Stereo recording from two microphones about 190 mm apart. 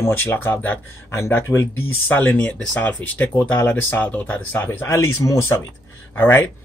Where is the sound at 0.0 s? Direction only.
10° left (ahead or behind).